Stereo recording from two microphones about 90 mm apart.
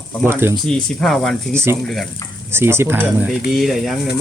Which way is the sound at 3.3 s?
Centre (ahead or behind).